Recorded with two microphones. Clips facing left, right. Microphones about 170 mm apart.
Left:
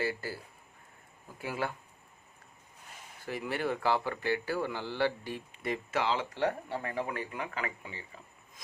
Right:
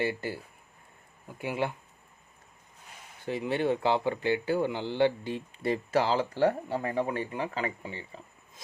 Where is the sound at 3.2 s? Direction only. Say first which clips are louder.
Right 5 dB; 20° right (ahead or behind).